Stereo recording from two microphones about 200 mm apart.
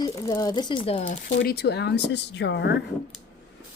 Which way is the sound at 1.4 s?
55° left (ahead or behind).